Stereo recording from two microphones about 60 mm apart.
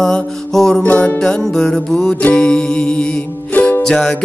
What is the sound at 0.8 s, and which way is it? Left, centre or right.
Music, left.